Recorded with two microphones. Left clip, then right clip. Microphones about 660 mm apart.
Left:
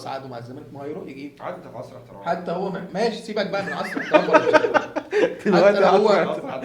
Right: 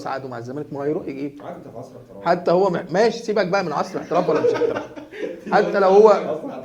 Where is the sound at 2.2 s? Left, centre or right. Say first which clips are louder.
Right 8 dB; right.